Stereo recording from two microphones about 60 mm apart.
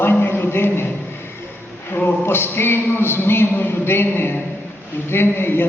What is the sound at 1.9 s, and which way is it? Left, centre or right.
Speech, left.